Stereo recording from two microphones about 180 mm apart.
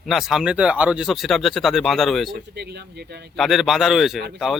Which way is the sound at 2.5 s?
65° right (ahead or behind).